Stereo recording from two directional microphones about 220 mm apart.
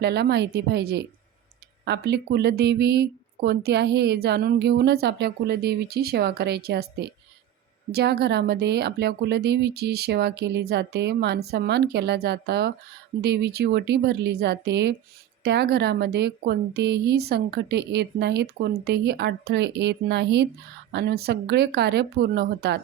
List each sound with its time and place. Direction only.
0.0 s speech: 50° right (ahead or behind)